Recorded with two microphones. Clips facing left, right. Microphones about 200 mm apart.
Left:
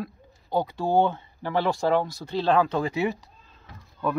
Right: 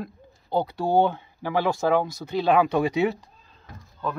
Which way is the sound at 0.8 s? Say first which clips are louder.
Right 1 dB; 15° right (ahead or behind).